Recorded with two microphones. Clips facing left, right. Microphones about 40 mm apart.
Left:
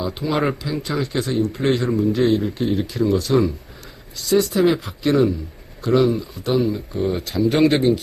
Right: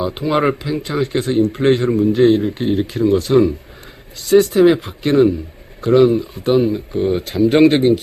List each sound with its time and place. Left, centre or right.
0.0 s speech: right